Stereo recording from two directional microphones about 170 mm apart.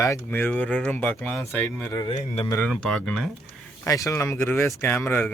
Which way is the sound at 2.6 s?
5° left (ahead or behind).